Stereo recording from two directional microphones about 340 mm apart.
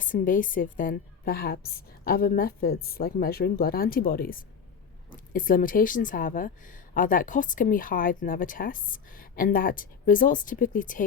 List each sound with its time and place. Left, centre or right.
0.0 s a woman's voice: left